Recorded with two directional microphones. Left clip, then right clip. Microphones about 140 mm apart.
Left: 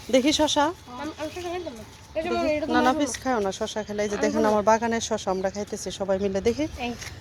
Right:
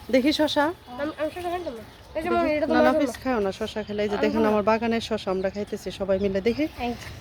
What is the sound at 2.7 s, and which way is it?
Speech, centre (ahead or behind).